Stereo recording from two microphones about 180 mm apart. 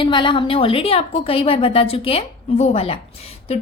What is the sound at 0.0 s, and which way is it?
Speech, 25° left (ahead or behind).